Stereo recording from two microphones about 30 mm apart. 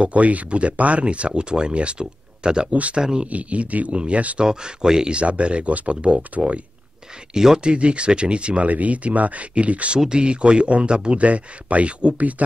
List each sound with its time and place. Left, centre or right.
0.0 s speech: right
1.3 s speech: right
2.7 s speech: right
3.0 s speech: right
3.3 s speech: right
3.9 s speech: right
4.4 s speech: right
5.1 s speech: right
7.3 s speech: right
7.7 s speech: right
8.6 s speech: right
9.5 s speech: right
9.9 s speech: right